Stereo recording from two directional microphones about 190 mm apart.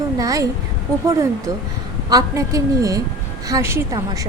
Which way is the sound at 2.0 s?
20° right (ahead or behind).